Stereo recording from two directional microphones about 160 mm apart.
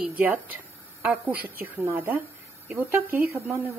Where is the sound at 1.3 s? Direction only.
70° right (ahead or behind).